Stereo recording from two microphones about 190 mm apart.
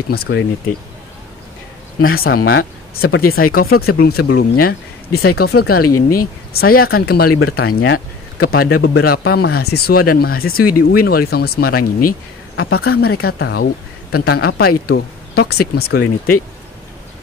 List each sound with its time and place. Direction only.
0.1 s speech: 65° left (ahead or behind)
2.1 s speech: 55° left (ahead or behind)